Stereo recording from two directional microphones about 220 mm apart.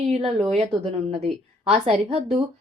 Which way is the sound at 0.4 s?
25° right (ahead or behind).